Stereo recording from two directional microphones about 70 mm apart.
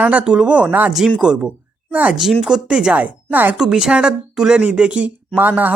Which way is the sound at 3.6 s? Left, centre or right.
Centre.